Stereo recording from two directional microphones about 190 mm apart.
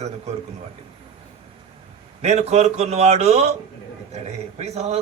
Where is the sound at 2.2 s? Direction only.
35° right (ahead or behind).